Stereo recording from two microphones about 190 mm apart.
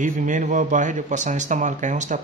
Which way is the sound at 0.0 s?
40° right (ahead or behind).